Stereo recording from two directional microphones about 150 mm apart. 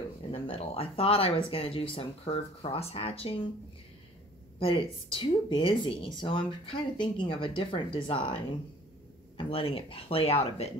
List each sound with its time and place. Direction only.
0.3 s speech: 40° left (ahead or behind)
4.6 s speech: 35° left (ahead or behind)
9.4 s speech: 35° left (ahead or behind)